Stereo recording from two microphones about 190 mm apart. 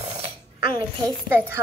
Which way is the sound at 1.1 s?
10° right (ahead or behind).